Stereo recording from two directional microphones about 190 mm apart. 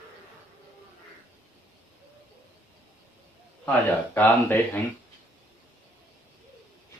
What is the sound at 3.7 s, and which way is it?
Speech, 10° left (ahead or behind).